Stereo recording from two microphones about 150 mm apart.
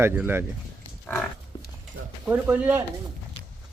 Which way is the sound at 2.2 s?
10° right (ahead or behind).